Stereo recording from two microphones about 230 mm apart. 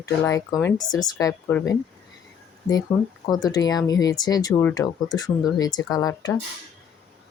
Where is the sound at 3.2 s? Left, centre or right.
Centre.